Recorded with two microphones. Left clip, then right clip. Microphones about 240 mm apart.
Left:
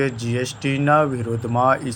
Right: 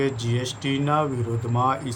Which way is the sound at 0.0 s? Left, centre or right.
Centre.